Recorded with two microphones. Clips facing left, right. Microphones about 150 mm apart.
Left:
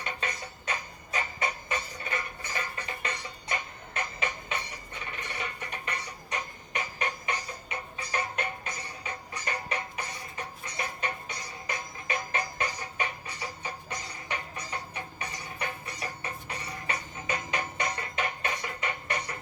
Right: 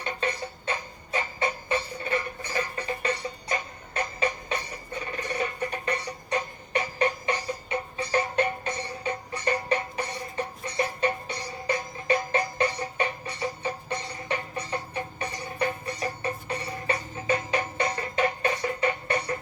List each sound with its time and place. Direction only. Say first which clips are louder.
0.0 s music: right 6 dB; 30° right (ahead or behind)